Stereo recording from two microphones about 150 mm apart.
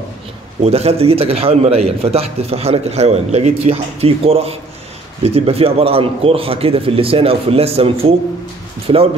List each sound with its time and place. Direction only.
0.6 s a man's voice: 45° right (ahead or behind)